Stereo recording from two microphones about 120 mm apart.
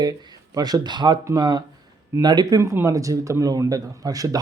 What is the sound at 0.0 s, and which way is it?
A man's voice, 30° right (ahead or behind).